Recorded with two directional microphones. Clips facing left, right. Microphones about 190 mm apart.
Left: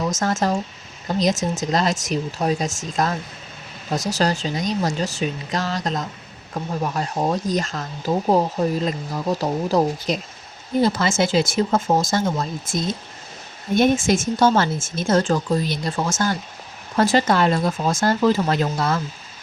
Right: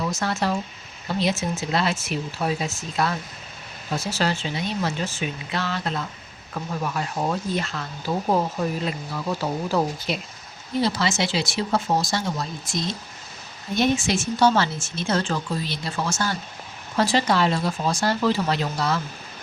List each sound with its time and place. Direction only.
0.0 s speech: 45° left (ahead or behind)
10.8 s speech: 50° left (ahead or behind)
17.0 s speech: 50° left (ahead or behind)